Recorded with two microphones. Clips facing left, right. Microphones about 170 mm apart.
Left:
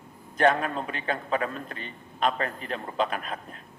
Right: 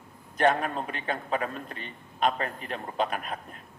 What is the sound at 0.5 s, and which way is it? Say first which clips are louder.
A man's voice: left 1 dB; 35° left (ahead or behind).